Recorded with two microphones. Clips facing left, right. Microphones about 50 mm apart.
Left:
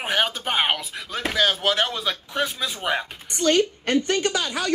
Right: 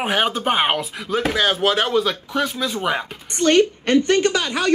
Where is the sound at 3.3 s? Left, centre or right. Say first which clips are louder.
Right 4 dB; right.